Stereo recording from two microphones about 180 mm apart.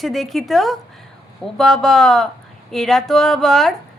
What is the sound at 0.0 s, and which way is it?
A woman's voice, centre (ahead or behind).